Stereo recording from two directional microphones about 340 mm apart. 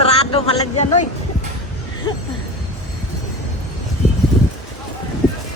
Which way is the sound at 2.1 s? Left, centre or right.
Centre.